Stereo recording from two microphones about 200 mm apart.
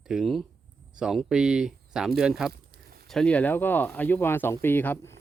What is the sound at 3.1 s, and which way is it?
Speech, 5° left (ahead or behind).